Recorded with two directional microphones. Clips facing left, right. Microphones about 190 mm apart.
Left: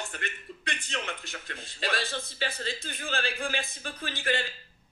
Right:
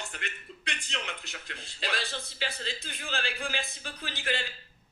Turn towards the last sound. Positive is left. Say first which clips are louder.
# left 3 dB
turn(degrees=50)  # may be behind; listen again after turning